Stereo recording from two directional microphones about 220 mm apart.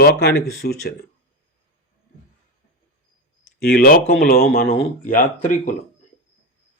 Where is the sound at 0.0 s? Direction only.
50° left (ahead or behind).